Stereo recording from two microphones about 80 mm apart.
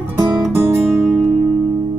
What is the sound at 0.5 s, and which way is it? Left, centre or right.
Music, right.